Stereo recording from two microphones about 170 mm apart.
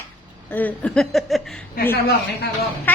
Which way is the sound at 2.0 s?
75° left (ahead or behind).